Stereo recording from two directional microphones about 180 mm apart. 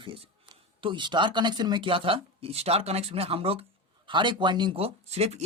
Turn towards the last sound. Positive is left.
turn(degrees=-35)  # may be behind; listen again after turning